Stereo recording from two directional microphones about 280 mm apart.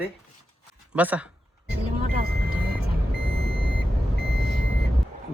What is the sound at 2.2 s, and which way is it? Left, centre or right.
Vehicle, right.